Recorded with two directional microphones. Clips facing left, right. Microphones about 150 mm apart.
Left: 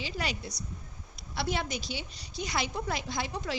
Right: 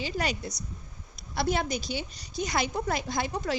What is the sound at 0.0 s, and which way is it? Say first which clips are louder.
A woman's voice: right 4 dB; 45° right (ahead or behind).